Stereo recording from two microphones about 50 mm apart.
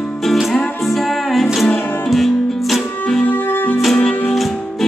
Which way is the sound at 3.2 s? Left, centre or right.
Left.